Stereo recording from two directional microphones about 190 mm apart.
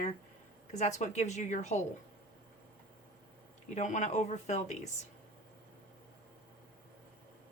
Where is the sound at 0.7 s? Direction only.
40° left (ahead or behind).